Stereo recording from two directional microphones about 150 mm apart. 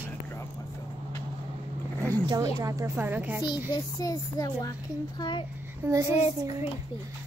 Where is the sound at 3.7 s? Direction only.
25° left (ahead or behind).